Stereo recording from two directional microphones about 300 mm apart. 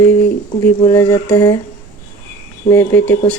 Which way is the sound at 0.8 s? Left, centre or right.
Centre.